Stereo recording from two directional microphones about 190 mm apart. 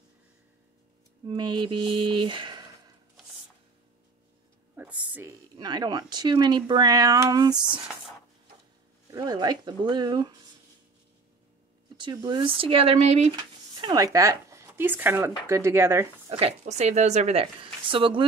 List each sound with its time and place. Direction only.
1.2 s speech: 25° right (ahead or behind)
4.7 s a sound: 10° right (ahead or behind)
5.6 s speech: 20° right (ahead or behind)
9.1 s speech: 20° right (ahead or behind)
12.0 s speech: 20° right (ahead or behind)
13.4 s speech: 25° right (ahead or behind)
16.3 s speech: 30° right (ahead or behind)